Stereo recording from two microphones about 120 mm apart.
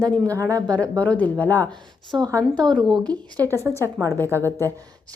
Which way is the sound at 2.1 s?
30° right (ahead or behind).